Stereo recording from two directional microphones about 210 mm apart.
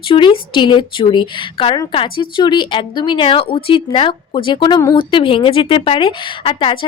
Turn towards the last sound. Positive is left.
turn(degrees=25)  # may be behind; listen again after turning